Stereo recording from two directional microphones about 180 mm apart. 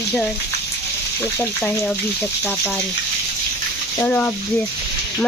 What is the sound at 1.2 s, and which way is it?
Speech, 10° left (ahead or behind).